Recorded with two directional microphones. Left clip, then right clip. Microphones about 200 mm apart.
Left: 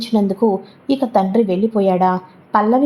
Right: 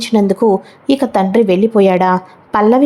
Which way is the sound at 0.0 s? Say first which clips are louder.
Right 5 dB; 25° right (ahead or behind).